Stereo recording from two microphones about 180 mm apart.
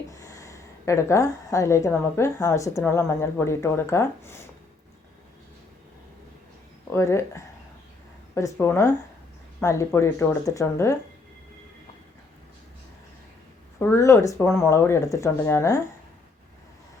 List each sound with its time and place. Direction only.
0.1 s a woman's voice: 15° left (ahead or behind)
6.9 s a woman's voice: 15° left (ahead or behind)
13.7 s a woman's voice: 15° left (ahead or behind)